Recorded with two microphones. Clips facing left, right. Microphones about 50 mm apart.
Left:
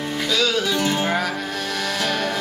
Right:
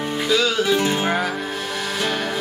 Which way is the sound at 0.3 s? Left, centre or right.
Centre.